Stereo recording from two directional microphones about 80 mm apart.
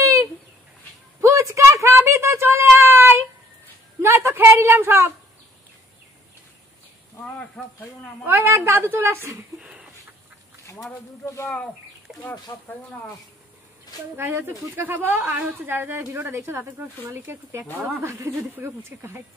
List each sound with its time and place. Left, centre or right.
0.0 s chicken: right
1.2 s a sound: right
4.0 s a woman's voice: right
7.6 s speech: centre
8.3 s speech: right
9.6 s a sound: centre
10.7 s speech: left
11.4 s speech: centre
14.1 s speech: right